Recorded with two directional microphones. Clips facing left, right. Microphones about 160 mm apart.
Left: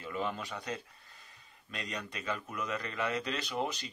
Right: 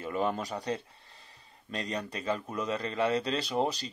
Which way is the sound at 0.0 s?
45° right (ahead or behind).